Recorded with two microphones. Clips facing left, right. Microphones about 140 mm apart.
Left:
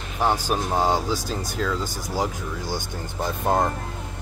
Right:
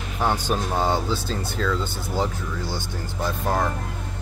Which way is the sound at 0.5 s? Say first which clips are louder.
Left 1 dB; 10° left (ahead or behind).